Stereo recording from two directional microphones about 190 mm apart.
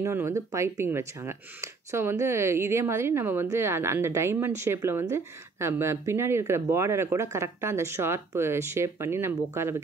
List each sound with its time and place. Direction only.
0.0 s speech: 15° right (ahead or behind)